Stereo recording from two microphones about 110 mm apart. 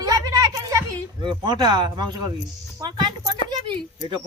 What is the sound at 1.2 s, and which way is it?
Speech, 45° right (ahead or behind).